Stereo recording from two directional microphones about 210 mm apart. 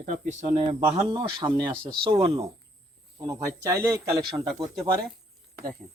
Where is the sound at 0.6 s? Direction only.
20° right (ahead or behind).